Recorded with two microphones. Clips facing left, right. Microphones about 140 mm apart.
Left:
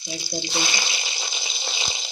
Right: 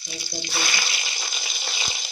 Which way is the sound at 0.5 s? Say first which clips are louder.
Right 2 dB; 20° left (ahead or behind).